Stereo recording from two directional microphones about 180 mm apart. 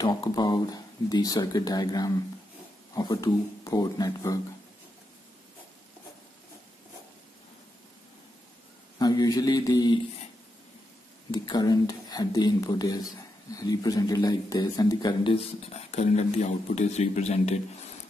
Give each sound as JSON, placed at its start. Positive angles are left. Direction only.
{"t": 0.0, "sound": "speech", "side_deg": 20}
{"t": 8.9, "sound": "speech", "side_deg": 20}
{"t": 11.3, "sound": "speech", "side_deg": 25}